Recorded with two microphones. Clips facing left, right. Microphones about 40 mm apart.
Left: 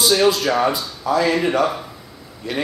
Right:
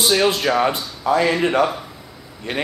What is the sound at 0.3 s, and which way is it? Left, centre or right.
Speech, right.